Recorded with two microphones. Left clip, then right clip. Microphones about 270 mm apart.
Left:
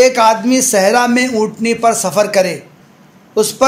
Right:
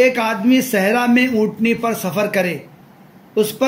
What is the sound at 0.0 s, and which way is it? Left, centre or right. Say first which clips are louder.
Speech: left 6 dB; centre.